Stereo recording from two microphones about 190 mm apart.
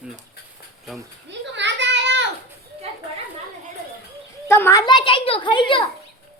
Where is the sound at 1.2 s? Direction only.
70° right (ahead or behind).